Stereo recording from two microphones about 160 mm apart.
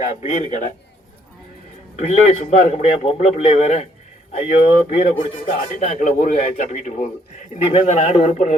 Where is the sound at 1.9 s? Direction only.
50° left (ahead or behind).